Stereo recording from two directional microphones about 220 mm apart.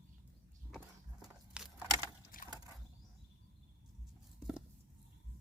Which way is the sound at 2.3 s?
40° left (ahead or behind).